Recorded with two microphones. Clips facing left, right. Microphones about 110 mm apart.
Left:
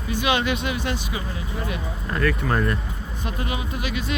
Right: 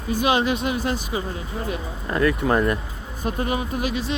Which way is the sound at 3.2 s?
40° right (ahead or behind).